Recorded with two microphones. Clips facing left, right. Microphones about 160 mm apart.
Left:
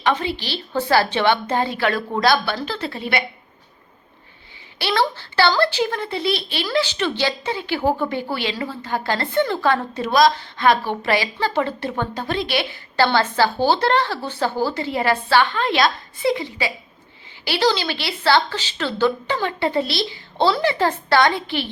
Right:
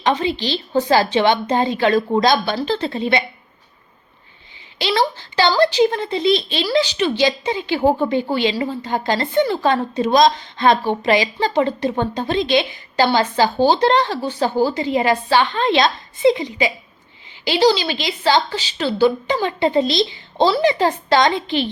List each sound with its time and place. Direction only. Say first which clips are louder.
0.0 s a woman's voice: right 3 dB; 20° right (ahead or behind)
4.8 s a woman's voice: right 2 dB; 15° right (ahead or behind)